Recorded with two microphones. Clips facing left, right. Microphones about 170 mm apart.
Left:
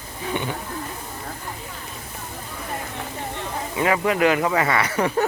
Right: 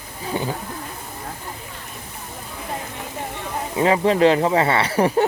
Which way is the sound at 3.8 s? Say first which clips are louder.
Right 4 dB; 30° right (ahead or behind).